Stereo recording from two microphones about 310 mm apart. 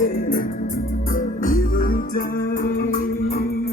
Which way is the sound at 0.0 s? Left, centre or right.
Left.